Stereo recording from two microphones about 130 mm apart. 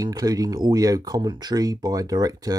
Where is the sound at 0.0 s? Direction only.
30° right (ahead or behind).